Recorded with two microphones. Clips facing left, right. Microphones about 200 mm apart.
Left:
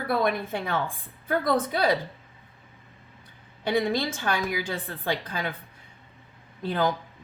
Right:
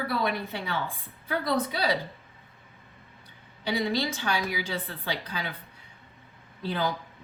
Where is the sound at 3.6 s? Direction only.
50° left (ahead or behind).